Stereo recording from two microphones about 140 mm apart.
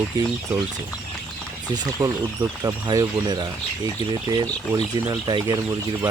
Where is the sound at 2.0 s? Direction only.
20° right (ahead or behind).